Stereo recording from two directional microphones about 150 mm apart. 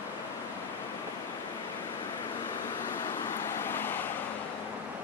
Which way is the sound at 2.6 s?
15° left (ahead or behind).